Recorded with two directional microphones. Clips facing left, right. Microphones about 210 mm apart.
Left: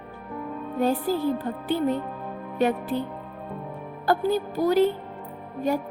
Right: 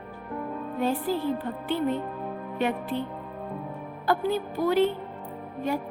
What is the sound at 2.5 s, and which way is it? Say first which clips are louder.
Music: left 4 dB; 40° left (ahead or behind).